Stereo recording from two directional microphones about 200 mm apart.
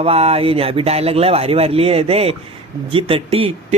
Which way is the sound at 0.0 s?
30° right (ahead or behind).